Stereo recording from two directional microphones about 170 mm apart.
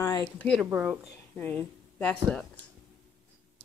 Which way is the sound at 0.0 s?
20° left (ahead or behind).